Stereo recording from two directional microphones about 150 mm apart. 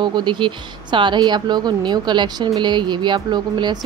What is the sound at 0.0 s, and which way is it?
Speech, 30° right (ahead or behind).